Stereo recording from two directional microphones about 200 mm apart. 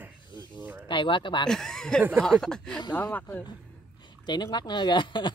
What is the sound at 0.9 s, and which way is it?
Speech, 25° left (ahead or behind).